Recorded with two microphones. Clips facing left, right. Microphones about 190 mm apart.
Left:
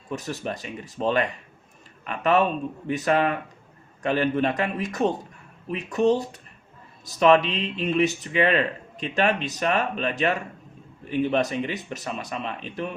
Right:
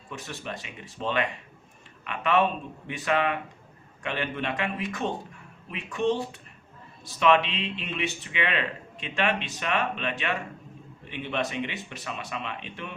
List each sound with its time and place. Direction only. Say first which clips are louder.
0.1 s speech: left 7 dB; 40° left (ahead or behind)